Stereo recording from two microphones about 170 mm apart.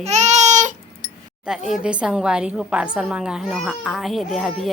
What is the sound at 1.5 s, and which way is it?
A child's voice, 5° right (ahead or behind).